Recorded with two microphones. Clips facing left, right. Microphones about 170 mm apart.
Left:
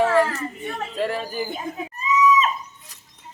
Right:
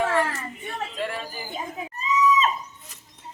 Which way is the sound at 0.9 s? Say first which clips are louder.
Left 7 dB; 35° left (ahead or behind).